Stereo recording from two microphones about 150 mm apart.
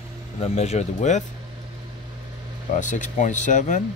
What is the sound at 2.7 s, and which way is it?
Speech, 55° left (ahead or behind).